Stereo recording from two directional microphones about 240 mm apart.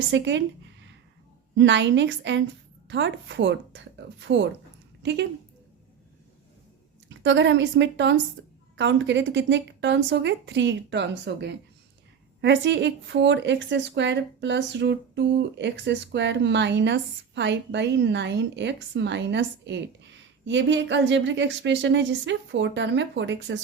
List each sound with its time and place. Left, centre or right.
0.1 s speech: right
7.1 s speech: right